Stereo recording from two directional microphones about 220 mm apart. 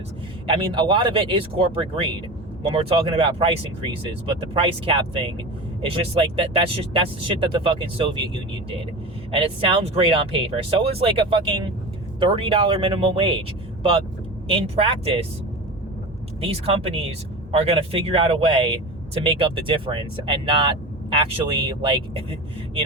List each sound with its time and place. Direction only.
0.4 s speech: 25° right (ahead or behind)
9.8 s speech: 25° right (ahead or behind)
14.4 s speech: 25° right (ahead or behind)
16.4 s speech: 25° right (ahead or behind)